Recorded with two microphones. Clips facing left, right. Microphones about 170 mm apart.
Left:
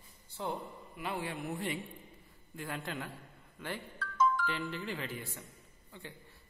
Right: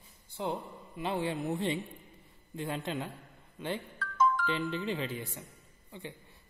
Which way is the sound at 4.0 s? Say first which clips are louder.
Right 1 dB; 50° right (ahead or behind).